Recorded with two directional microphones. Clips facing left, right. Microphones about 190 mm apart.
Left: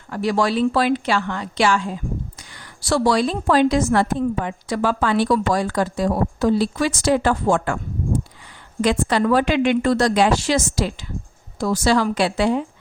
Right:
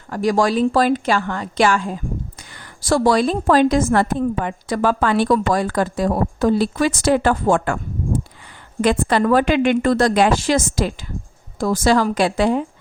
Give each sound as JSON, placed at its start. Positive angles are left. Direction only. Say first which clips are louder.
{"t": 0.1, "sound": "a woman's voice", "louder": "right 3 dB", "side_deg": -45}
{"t": 8.8, "sound": "a woman's voice", "louder": "right 2 dB", "side_deg": -50}